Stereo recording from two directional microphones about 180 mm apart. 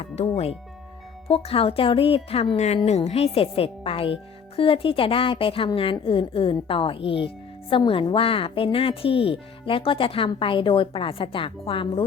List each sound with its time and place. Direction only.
0.0 s speech: 35° left (ahead or behind)